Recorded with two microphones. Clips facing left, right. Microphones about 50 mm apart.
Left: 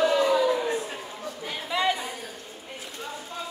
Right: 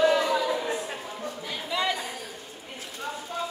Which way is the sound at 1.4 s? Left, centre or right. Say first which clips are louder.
Left 3 dB; centre.